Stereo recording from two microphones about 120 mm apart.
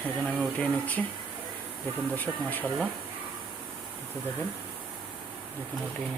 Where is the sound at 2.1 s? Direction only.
15° left (ahead or behind).